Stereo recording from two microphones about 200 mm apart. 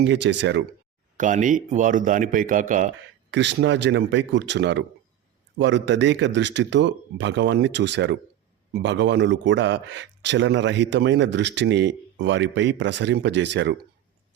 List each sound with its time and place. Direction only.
0.0 s a man's voice: 60° right (ahead or behind)
1.1 s a man's voice: 40° right (ahead or behind)
3.3 s a man's voice: 60° right (ahead or behind)